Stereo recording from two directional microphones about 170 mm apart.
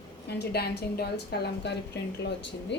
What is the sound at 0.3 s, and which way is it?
A woman's voice, 75° left (ahead or behind).